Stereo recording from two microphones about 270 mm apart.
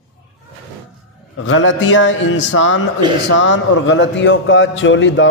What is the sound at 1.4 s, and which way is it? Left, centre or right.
A man's voice, left.